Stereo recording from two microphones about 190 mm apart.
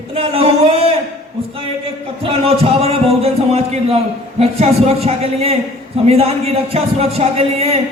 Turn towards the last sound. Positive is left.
turn(degrees=-30)  # may be behind; listen again after turning